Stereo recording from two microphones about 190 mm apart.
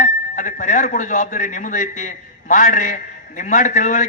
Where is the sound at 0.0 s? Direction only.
45° left (ahead or behind).